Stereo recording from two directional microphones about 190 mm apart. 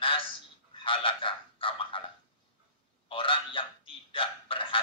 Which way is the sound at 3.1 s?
30° left (ahead or behind).